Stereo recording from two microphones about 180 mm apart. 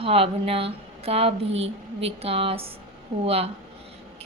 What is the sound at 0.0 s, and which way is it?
Speech, 30° right (ahead or behind).